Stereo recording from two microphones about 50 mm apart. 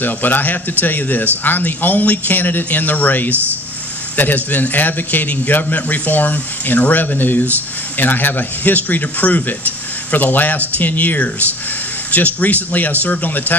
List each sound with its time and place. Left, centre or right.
0.0 s a man's voice: left